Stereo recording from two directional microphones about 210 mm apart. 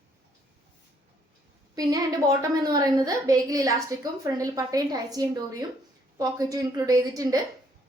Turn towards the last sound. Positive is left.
turn(degrees=-15)  # may be behind; listen again after turning